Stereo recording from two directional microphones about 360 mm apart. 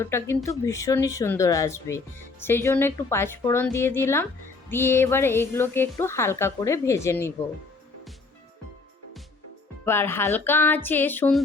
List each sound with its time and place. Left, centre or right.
0.0 s a woman's voice: centre
9.8 s speech: centre